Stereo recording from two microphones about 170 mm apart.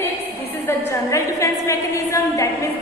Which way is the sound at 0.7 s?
15° left (ahead or behind).